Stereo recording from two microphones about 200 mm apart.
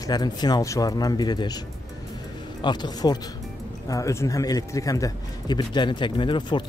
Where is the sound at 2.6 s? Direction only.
20° left (ahead or behind).